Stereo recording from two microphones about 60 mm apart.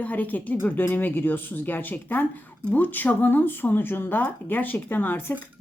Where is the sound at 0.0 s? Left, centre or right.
Left.